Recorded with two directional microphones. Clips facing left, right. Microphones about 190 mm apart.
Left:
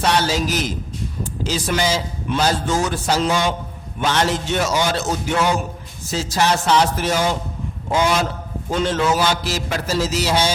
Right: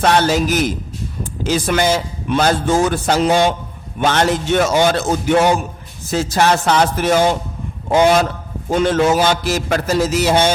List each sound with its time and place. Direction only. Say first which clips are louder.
0.0 s a man's voice: right 5 dB; 55° right (ahead or behind)